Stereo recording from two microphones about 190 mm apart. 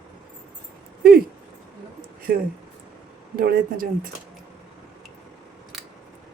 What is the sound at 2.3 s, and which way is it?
Speech, 55° right (ahead or behind).